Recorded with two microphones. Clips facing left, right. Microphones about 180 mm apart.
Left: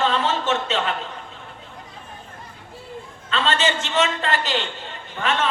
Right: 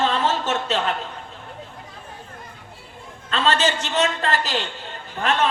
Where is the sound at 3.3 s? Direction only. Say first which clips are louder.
Right 1 dB; 40° right (ahead or behind).